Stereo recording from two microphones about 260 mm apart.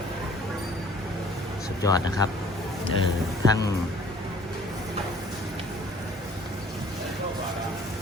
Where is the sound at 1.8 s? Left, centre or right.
Centre.